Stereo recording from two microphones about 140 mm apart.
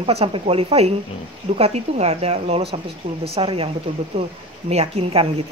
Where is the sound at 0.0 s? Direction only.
45° right (ahead or behind).